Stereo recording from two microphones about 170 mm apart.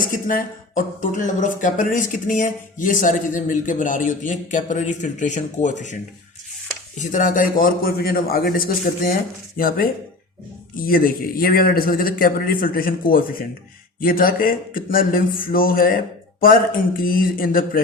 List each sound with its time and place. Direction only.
0.0 s speech: 55° left (ahead or behind)
7.0 s speech: 50° left (ahead or behind)